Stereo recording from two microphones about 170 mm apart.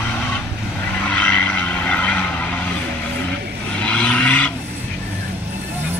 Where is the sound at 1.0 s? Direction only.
10° left (ahead or behind).